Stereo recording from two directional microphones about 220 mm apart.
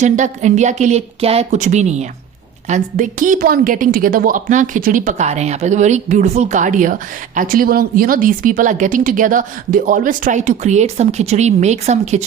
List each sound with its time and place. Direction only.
0.0 s a woman's voice: 35° right (ahead or behind)